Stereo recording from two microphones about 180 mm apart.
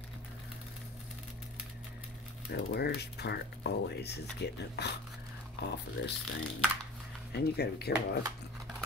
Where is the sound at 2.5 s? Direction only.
65° left (ahead or behind).